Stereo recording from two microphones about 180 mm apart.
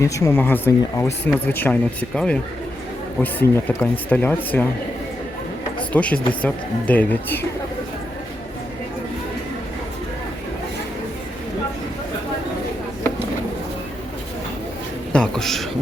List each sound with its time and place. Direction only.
0.0 s speech: 15° left (ahead or behind)
5.9 s speech: 5° left (ahead or behind)
15.1 s a sound: 5° left (ahead or behind)